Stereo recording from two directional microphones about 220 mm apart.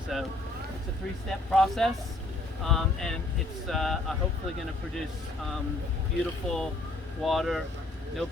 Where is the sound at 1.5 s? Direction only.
Centre (ahead or behind).